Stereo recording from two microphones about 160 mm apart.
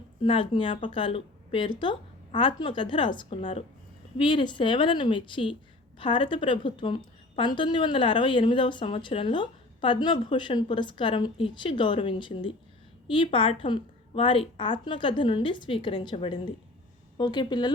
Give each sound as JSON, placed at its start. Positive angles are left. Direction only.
{"t": 0.2, "sound": "a woman's voice", "side_deg": 30}